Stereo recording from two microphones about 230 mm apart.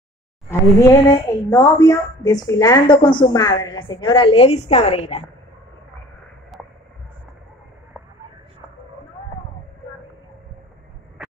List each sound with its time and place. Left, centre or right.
0.5 s speech: centre